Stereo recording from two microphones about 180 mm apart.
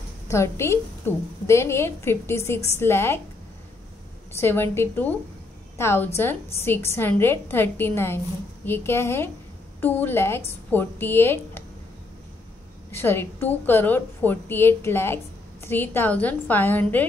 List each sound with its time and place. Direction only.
0.3 s a woman's voice: 15° left (ahead or behind)
4.4 s a woman's voice: 15° left (ahead or behind)
12.9 s a woman's voice: 10° left (ahead or behind)